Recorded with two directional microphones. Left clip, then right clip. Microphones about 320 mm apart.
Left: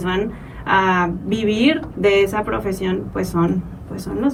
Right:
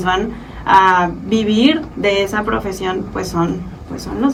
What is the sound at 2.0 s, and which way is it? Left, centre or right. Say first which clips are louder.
Speech: even; centre.